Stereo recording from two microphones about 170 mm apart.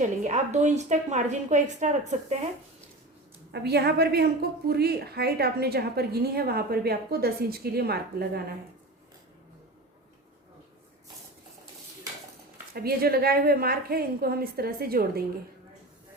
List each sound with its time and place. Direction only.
0.0 s a woman's voice: 45° right (ahead or behind)
3.5 s a woman's voice: 75° right (ahead or behind)
12.7 s a woman's voice: 65° right (ahead or behind)